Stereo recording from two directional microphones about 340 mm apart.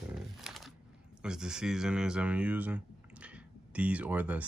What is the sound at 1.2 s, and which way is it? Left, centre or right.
Speech, centre.